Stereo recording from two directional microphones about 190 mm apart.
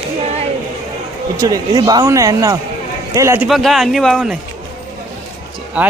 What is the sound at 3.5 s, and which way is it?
Speech, centre (ahead or behind).